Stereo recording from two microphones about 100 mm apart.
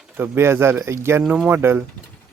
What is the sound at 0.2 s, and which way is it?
Speech, 25° right (ahead or behind).